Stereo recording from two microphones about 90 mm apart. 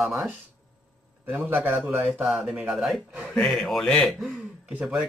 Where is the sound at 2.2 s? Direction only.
5° right (ahead or behind).